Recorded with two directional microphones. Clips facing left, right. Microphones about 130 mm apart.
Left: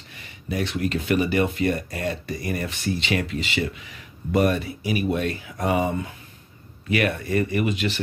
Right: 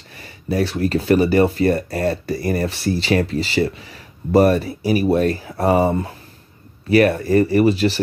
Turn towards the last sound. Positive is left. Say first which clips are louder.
# right 9 dB
turn(degrees=-35)  # may be behind; listen again after turning